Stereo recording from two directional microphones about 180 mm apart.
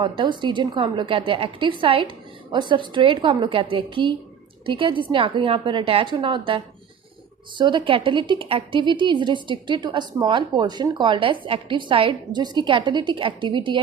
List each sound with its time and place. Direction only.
0.0 s a woman's voice: 25° right (ahead or behind)
7.6 s a woman's voice: 25° right (ahead or behind)